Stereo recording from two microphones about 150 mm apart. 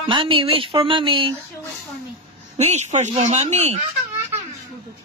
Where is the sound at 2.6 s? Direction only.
45° right (ahead or behind).